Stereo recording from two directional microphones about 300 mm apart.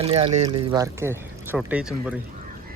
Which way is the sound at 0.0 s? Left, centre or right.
Centre.